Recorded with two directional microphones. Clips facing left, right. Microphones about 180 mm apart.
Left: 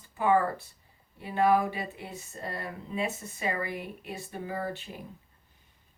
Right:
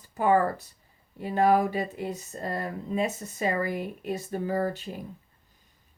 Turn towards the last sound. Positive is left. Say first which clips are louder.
# right 6 dB
turn(degrees=-40)  # may be behind; listen again after turning